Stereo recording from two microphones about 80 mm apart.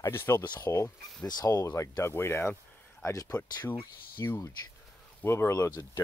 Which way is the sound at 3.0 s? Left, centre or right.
Left.